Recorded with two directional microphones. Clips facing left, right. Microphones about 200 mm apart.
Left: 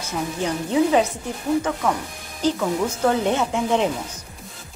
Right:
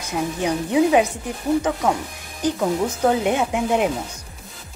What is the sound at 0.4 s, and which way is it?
Speech, 15° right (ahead or behind).